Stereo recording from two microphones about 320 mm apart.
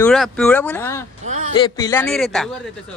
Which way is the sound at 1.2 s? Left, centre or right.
Right.